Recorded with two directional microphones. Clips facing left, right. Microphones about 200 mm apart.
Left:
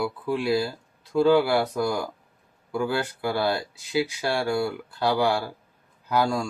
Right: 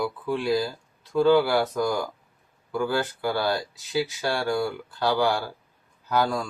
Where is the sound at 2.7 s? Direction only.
15° left (ahead or behind).